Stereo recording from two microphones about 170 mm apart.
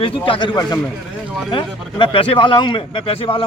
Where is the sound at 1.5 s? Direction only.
30° left (ahead or behind).